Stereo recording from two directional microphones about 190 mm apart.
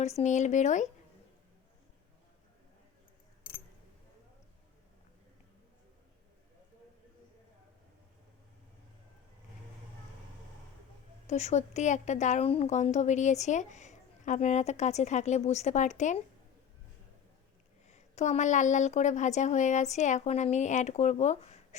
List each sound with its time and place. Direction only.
0.0 s a woman's voice: 35° left (ahead or behind)
11.3 s a woman's voice: 35° left (ahead or behind)
17.8 s a woman's voice: 35° left (ahead or behind)